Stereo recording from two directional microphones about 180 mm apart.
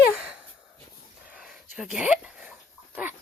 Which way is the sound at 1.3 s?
5° right (ahead or behind).